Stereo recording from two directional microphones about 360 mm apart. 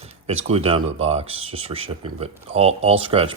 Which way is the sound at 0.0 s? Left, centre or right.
Centre.